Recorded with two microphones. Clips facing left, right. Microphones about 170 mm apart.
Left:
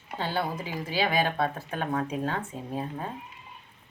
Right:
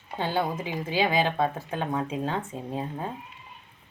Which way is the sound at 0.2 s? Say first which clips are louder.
Right 3 dB; 15° right (ahead or behind).